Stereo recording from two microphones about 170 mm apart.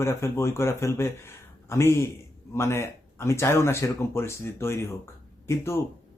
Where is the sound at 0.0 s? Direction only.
15° left (ahead or behind).